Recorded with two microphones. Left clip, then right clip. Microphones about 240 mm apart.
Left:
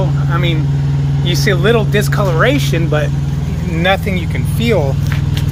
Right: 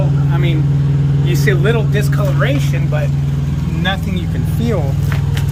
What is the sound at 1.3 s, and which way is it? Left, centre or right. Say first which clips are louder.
Speech: left 4 dB; left.